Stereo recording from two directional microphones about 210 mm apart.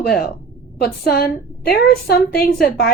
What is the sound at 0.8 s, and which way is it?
A woman's voice, 45° left (ahead or behind).